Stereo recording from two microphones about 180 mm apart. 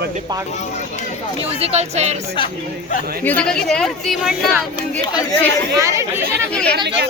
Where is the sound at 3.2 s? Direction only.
5° left (ahead or behind).